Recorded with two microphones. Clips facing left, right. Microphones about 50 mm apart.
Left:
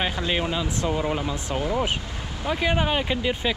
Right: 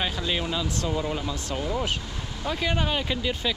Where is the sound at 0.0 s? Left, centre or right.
Left.